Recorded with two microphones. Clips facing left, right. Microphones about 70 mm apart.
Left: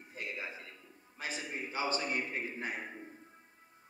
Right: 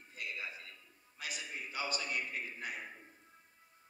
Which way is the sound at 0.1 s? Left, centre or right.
Left.